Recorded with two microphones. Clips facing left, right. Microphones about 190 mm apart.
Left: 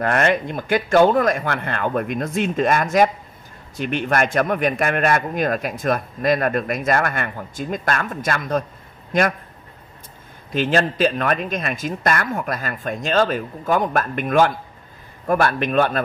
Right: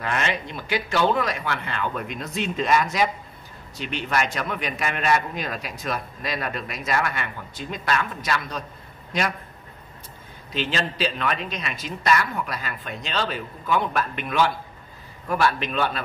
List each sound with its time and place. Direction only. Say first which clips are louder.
0.0 s a man's voice: left 8 dB; 50° left (ahead or behind)
10.5 s a man's voice: left 8 dB; 50° left (ahead or behind)